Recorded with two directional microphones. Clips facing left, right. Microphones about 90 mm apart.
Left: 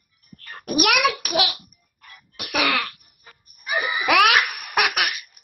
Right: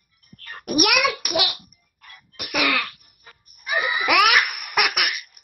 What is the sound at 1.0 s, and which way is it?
Speech, 40° left (ahead or behind).